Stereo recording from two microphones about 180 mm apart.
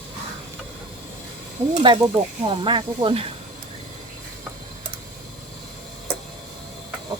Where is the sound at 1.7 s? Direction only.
25° right (ahead or behind).